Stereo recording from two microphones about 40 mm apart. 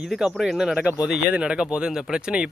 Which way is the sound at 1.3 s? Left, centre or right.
Right.